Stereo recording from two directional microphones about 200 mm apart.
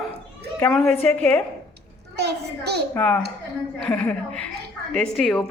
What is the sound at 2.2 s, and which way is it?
Speech, 55° right (ahead or behind).